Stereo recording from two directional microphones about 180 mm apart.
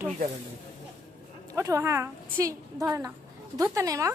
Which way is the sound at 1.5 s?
20° right (ahead or behind).